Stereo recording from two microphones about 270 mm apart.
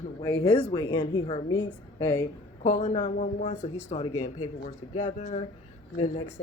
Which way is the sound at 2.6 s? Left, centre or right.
Left.